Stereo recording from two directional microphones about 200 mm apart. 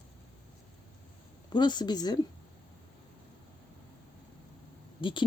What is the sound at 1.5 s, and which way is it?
Speech, 20° left (ahead or behind).